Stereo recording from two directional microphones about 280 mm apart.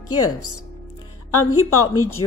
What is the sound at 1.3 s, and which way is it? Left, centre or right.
Speech, left.